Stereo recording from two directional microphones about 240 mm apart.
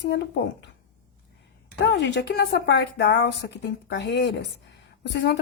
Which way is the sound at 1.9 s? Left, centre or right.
Left.